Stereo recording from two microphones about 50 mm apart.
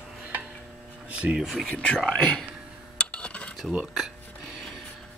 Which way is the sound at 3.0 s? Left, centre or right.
Left.